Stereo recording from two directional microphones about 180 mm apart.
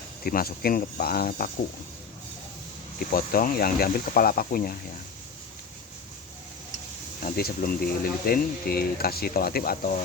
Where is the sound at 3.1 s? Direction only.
55° left (ahead or behind).